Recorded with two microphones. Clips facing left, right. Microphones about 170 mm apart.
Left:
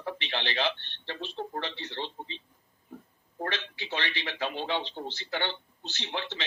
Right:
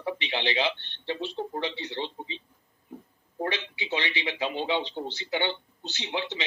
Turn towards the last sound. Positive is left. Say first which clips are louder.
# right 4 dB
turn(degrees=-15)  # may be behind; listen again after turning